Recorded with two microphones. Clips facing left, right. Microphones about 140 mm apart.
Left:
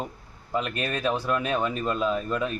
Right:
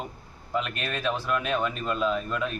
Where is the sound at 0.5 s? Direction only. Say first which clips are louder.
Left 2 dB; 40° left (ahead or behind).